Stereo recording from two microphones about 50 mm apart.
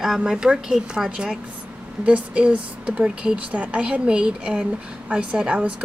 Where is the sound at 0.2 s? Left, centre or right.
Centre.